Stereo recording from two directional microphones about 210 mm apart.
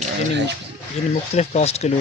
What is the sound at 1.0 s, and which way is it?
Speech, 30° left (ahead or behind).